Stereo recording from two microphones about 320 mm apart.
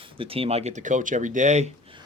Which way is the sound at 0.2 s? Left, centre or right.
Centre.